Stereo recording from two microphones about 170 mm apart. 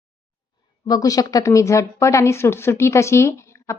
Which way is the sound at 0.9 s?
20° left (ahead or behind).